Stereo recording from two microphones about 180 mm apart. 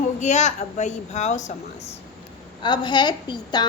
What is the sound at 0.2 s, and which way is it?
A woman's voice, 40° left (ahead or behind).